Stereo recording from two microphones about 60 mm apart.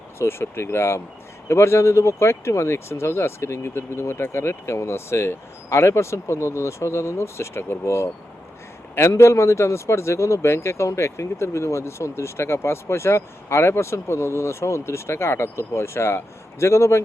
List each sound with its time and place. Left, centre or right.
0.2 s speech: left